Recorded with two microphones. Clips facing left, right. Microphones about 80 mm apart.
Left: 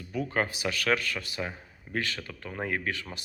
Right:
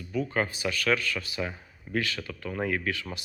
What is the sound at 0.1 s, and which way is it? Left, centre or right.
A man's voice, left.